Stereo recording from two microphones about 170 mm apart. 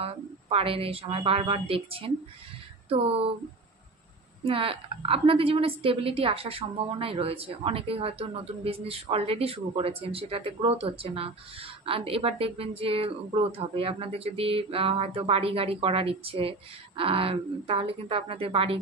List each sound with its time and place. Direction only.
0.0 s a woman's voice: 35° right (ahead or behind)
4.5 s a woman's voice: 35° right (ahead or behind)